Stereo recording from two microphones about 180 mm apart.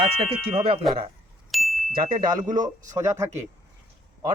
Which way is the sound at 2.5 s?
45° right (ahead or behind).